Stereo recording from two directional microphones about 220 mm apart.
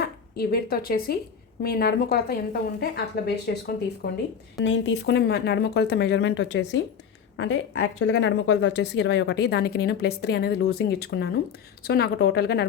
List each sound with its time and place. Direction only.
0.0 s a woman's voice: 45° left (ahead or behind)